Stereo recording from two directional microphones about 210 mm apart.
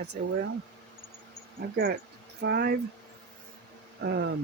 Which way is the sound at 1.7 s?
50° right (ahead or behind).